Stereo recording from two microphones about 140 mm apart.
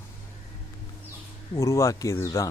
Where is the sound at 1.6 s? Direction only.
20° left (ahead or behind).